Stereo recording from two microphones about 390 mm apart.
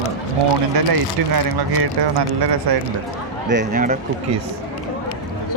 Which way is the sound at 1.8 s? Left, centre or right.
Right.